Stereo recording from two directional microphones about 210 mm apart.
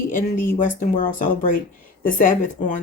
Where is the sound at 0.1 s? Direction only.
40° left (ahead or behind).